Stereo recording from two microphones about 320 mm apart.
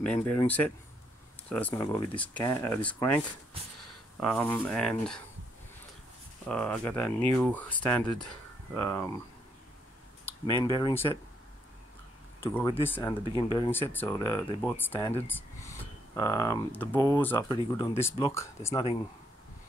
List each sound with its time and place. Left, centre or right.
0.0 s speech: centre
4.3 s speech: centre
6.4 s speech: centre
10.2 s speech: centre
12.4 s speech: centre